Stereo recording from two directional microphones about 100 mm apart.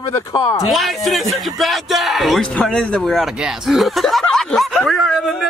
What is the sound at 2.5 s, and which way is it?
Speech, 10° left (ahead or behind).